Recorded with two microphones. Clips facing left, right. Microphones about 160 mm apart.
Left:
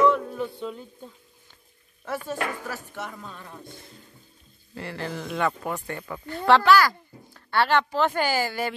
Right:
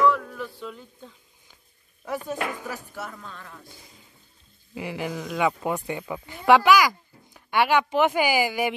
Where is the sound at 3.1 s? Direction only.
15° left (ahead or behind).